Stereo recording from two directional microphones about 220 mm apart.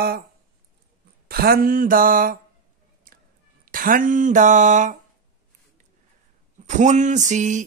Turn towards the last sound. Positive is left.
turn(degrees=-35)  # may be behind; listen again after turning